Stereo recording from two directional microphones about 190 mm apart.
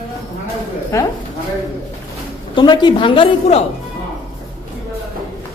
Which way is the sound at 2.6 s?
25° left (ahead or behind).